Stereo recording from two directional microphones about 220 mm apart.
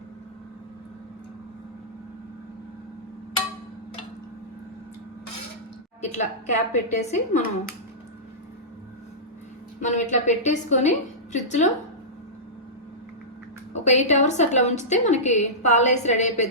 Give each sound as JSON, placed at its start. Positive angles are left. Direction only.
{"t": 6.0, "sound": "a woman's voice", "side_deg": 30}
{"t": 9.8, "sound": "a woman's voice", "side_deg": 30}
{"t": 13.7, "sound": "a woman's voice", "side_deg": 30}